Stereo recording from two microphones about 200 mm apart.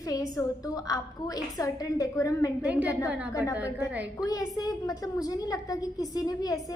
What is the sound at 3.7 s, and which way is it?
Speech, 10° right (ahead or behind).